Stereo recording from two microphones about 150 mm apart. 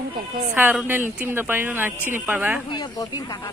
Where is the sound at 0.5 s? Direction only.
10° right (ahead or behind).